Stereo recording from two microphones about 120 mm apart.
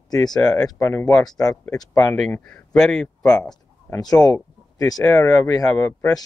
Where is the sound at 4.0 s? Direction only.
30° left (ahead or behind).